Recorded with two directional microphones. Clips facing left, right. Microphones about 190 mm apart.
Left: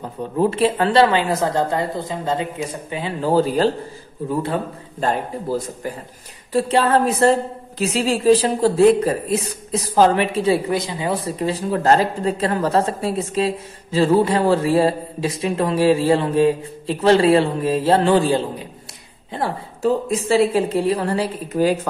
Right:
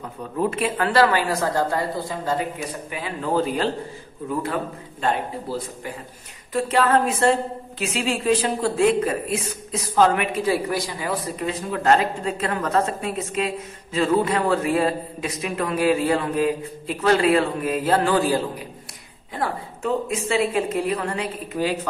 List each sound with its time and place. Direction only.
0.0 s a man's voice: 30° left (ahead or behind)
5.0 s a man's voice: 40° left (ahead or behind)
6.5 s a man's voice: 30° left (ahead or behind)